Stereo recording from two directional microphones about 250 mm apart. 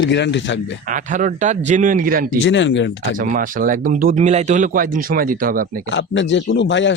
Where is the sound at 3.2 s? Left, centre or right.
Right.